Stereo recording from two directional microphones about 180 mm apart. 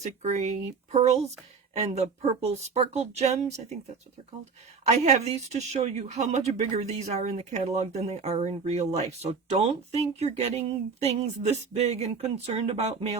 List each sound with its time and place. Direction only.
0.0 s speech: 40° right (ahead or behind)
4.9 s speech: 40° right (ahead or behind)